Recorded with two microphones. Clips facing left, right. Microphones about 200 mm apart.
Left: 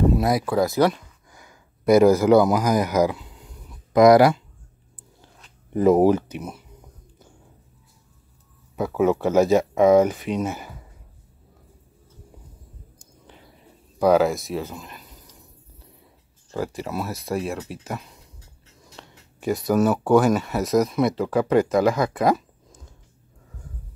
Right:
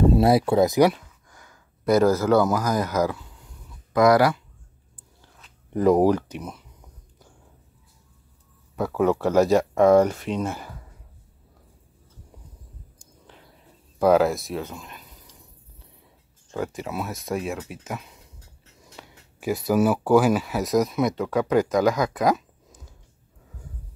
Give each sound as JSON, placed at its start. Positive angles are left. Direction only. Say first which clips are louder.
{"t": 0.0, "sound": "speech", "louder": "right 3 dB", "side_deg": -30}
{"t": 1.3, "sound": "a sound", "louder": "left 2 dB", "side_deg": 10}
{"t": 5.4, "sound": "speech", "louder": "left 2 dB", "side_deg": 5}
{"t": 8.7, "sound": "speech", "louder": "left 1 dB", "side_deg": 5}
{"t": 13.9, "sound": "speech", "louder": "left 1 dB", "side_deg": 0}
{"t": 16.5, "sound": "speech", "louder": "left 1 dB", "side_deg": 0}